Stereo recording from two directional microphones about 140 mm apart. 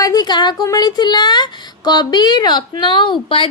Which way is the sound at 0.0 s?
30° left (ahead or behind).